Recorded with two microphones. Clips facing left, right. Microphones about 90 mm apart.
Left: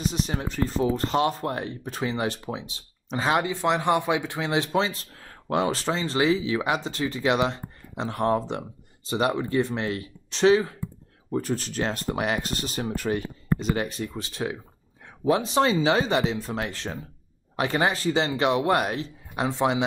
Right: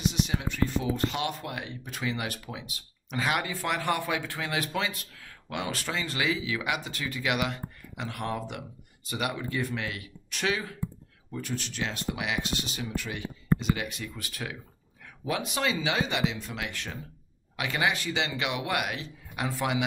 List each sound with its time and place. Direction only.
0.0 s speech: 40° left (ahead or behind)